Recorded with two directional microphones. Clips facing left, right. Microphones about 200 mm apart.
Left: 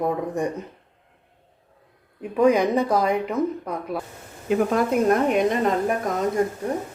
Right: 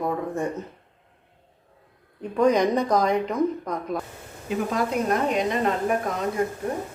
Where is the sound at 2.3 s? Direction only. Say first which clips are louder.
Left 2 dB; 10° left (ahead or behind).